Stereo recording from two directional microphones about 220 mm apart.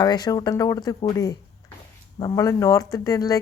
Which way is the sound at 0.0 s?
20° left (ahead or behind).